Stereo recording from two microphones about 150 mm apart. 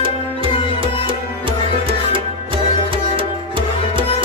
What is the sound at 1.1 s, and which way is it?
Music, 35° right (ahead or behind).